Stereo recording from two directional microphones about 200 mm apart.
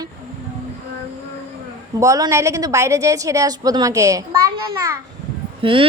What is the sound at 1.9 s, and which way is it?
A woman's voice, 15° right (ahead or behind).